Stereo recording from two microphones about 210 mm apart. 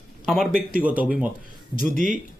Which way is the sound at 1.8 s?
40° right (ahead or behind).